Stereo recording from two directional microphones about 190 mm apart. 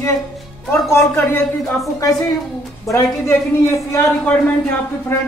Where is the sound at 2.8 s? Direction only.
15° left (ahead or behind).